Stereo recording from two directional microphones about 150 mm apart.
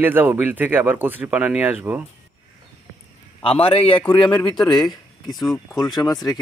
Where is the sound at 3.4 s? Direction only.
40° left (ahead or behind).